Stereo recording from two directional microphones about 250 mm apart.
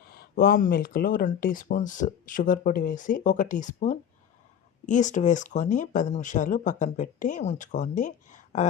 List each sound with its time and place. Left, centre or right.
0.1 s speech: left